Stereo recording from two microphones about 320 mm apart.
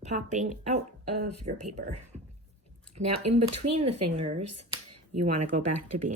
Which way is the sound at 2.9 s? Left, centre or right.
Right.